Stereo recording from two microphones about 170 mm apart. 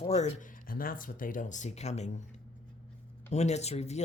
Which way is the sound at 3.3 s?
40° left (ahead or behind).